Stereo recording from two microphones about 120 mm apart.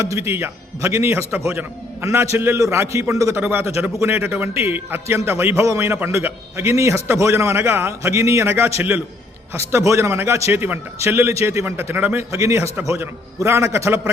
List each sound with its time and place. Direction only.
0.0 s a man's voice: 20° right (ahead or behind)